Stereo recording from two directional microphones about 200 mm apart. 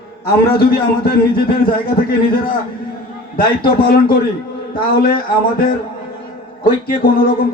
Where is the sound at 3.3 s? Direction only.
50° left (ahead or behind).